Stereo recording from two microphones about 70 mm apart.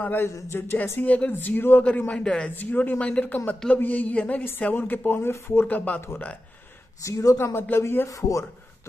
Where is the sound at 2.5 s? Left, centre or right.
Left.